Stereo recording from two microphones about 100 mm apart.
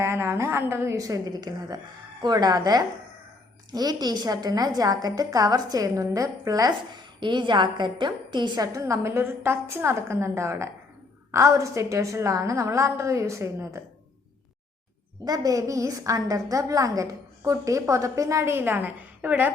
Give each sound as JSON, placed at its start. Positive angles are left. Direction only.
{"t": 0.0, "sound": "a woman's voice", "side_deg": -25}
{"t": 7.2, "sound": "a woman's voice", "side_deg": -50}
{"t": 15.2, "sound": "a woman's voice", "side_deg": -40}